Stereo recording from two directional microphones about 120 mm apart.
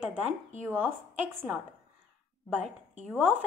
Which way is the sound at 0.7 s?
20° right (ahead or behind).